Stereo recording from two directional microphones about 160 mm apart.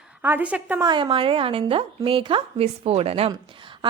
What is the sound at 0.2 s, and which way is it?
Speech, 10° right (ahead or behind).